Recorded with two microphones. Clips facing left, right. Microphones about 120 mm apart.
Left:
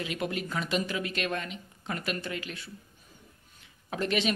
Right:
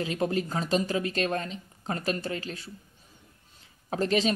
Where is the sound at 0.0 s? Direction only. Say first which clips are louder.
Right 5 dB; 35° right (ahead or behind).